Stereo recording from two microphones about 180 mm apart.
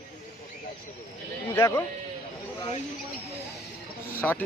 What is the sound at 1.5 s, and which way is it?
Speech, 15° left (ahead or behind).